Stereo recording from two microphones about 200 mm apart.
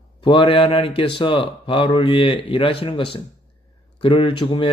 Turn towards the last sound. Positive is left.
turn(degrees=25)  # may be behind; listen again after turning